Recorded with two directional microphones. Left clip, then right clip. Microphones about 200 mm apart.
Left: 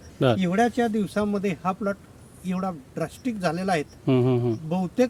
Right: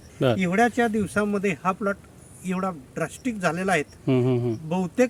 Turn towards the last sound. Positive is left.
turn(degrees=-5)  # may be behind; listen again after turning